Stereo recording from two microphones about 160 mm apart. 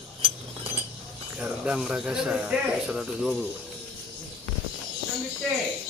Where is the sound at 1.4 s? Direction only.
5° right (ahead or behind).